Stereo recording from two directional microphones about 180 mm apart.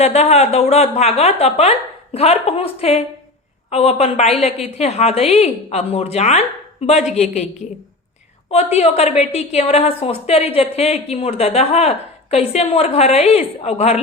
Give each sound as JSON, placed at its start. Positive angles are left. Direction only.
{"t": 0.0, "sound": "a woman's voice", "side_deg": 35}
{"t": 8.4, "sound": "a woman's voice", "side_deg": 35}